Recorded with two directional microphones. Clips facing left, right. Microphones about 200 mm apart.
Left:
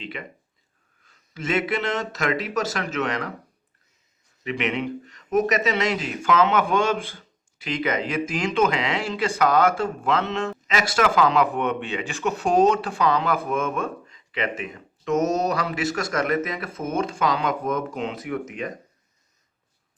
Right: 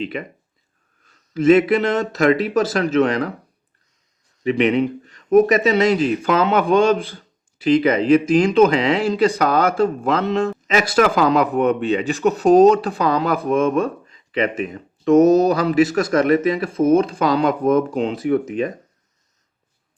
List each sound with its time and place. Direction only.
0.0 s speech: 40° right (ahead or behind)
1.3 s speech: 40° right (ahead or behind)
4.4 s speech: 35° right (ahead or behind)